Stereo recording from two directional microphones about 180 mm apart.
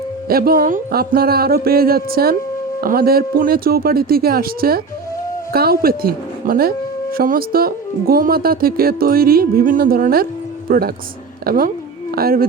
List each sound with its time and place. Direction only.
0.3 s speech: 55° right (ahead or behind)